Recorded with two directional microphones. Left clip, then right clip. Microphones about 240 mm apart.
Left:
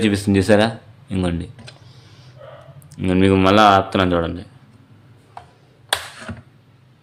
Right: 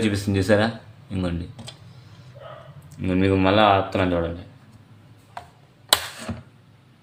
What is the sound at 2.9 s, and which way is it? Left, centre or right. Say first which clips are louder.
Speech: left 5 dB; left.